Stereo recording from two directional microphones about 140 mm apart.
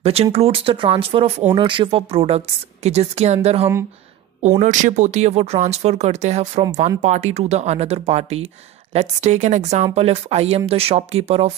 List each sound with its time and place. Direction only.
0.0 s a woman's voice: 45° right (ahead or behind)
4.4 s a woman's voice: 60° right (ahead or behind)